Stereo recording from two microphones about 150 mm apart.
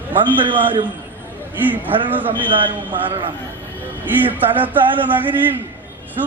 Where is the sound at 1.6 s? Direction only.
10° right (ahead or behind).